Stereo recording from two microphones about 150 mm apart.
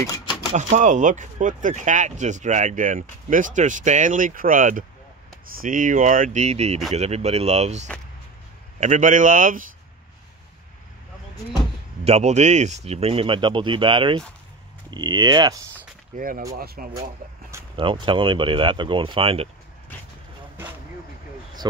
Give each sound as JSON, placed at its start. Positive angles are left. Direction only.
{"t": 0.6, "sound": "speech", "side_deg": -55}
{"t": 12.0, "sound": "speech", "side_deg": -45}
{"t": 16.2, "sound": "speech", "side_deg": -70}
{"t": 16.5, "sound": "speech", "side_deg": -80}
{"t": 17.7, "sound": "speech", "side_deg": -35}